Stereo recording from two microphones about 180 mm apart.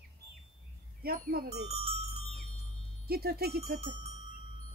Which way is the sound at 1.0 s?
55° right (ahead or behind).